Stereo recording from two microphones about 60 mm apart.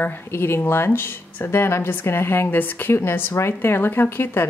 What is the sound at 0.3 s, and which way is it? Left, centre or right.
A woman's voice, left.